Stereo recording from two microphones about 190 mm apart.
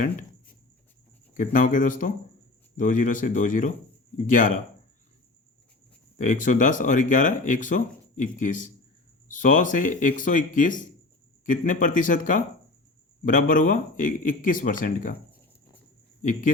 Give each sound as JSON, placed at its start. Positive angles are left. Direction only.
{"t": 1.3, "sound": "speech", "side_deg": 45}
{"t": 6.1, "sound": "speech", "side_deg": 40}